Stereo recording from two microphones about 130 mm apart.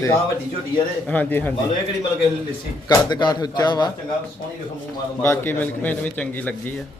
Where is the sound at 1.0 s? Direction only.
10° left (ahead or behind).